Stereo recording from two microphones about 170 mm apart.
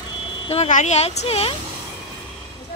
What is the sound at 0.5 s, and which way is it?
Speech, 45° left (ahead or behind).